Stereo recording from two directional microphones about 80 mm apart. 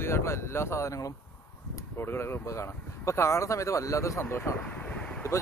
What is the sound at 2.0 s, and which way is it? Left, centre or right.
Speech, left.